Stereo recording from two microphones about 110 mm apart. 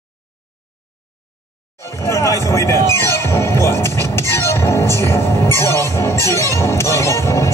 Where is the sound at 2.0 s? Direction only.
30° left (ahead or behind).